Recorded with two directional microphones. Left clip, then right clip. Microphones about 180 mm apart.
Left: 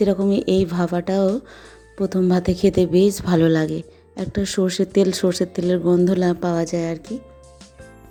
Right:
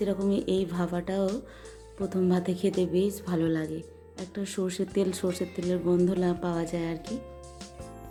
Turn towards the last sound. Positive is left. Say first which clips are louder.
# left 5 dB
turn(degrees=0)  # may be behind; listen again after turning